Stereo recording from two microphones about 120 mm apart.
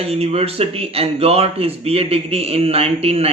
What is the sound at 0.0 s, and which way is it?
A man's voice, 55° right (ahead or behind).